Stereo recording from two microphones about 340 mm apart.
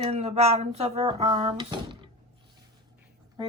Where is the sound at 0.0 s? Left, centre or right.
Centre.